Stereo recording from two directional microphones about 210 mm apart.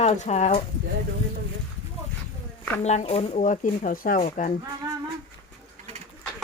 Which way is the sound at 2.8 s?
30° left (ahead or behind).